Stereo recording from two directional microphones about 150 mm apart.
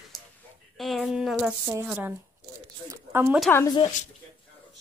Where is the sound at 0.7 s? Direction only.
Centre (ahead or behind); by 3.3 s 15° right (ahead or behind).